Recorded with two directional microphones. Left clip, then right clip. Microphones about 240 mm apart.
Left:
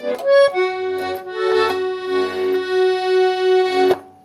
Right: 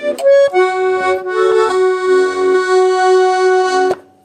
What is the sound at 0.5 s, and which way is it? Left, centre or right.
Accordion, right.